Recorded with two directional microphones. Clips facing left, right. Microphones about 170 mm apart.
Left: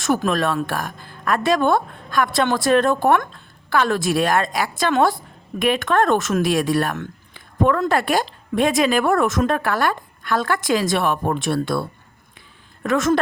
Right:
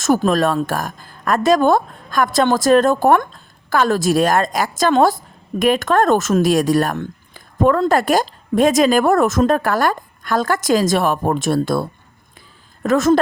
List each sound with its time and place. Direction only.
0.0 s a woman's voice: 40° right (ahead or behind)